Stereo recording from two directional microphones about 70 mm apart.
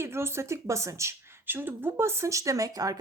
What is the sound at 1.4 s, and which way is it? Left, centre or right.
Speech, right.